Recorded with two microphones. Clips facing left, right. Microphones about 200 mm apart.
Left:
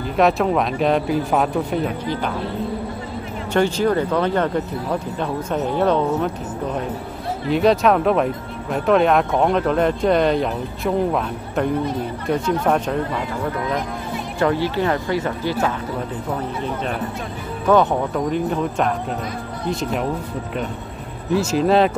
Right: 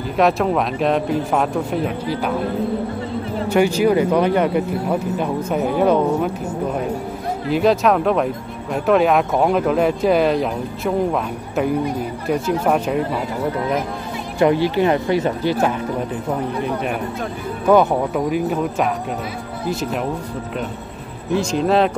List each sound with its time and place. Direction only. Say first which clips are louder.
0.2 s speech: even; centre (ahead or behind)
3.4 s speech: right 2 dB; 10° right (ahead or behind)
7.4 s speech: even; centre (ahead or behind)
14.4 s speech: right 4 dB; 15° right (ahead or behind)
21.3 s speech: left 1 dB; 5° left (ahead or behind)